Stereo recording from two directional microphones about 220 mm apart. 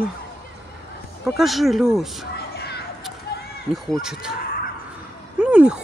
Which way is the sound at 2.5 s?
45° left (ahead or behind).